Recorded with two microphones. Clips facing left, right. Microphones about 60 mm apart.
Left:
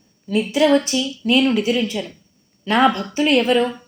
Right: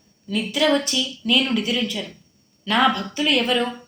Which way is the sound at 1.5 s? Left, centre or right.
Left.